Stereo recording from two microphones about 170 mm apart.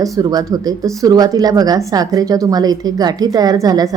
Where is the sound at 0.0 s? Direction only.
20° right (ahead or behind).